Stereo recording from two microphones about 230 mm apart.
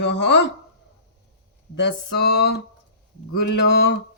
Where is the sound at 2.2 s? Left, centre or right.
Left.